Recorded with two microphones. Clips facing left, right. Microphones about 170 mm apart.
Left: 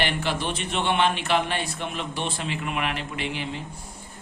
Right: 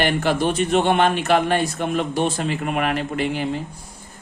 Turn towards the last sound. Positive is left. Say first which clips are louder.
# right 8 dB
turn(degrees=-45)  # may be behind; listen again after turning